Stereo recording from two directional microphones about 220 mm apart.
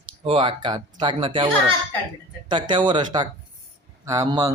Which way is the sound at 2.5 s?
20° right (ahead or behind).